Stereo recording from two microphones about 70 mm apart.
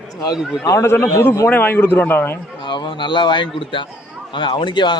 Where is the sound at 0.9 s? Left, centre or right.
Left.